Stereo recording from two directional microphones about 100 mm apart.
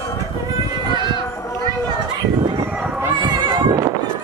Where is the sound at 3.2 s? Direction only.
50° right (ahead or behind).